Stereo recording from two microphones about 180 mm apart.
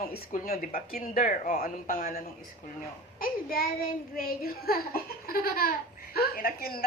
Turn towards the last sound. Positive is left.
turn(degrees=55)  # may be behind; listen again after turning